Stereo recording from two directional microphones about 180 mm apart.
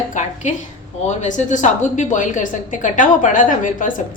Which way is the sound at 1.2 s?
45° left (ahead or behind).